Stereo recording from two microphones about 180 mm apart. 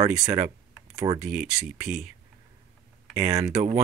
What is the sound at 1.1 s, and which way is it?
Speech, 5° right (ahead or behind).